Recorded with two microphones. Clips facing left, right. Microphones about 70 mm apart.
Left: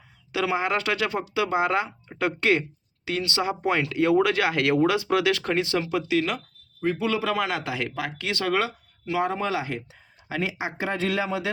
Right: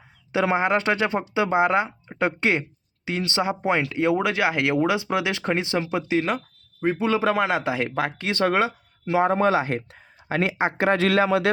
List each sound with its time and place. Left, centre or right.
0.3 s speech: right